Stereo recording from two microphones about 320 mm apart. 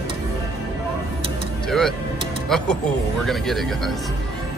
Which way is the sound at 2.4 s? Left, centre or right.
Centre.